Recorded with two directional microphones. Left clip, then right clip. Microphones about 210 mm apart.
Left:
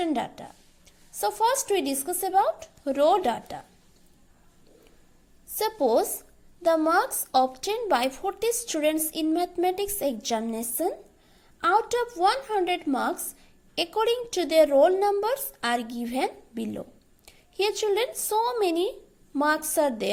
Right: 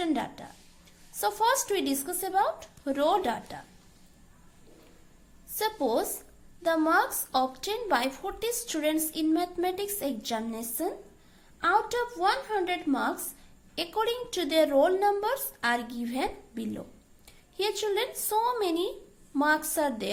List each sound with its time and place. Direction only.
0.0 s a woman's voice: 25° left (ahead or behind)
5.5 s a woman's voice: 30° left (ahead or behind)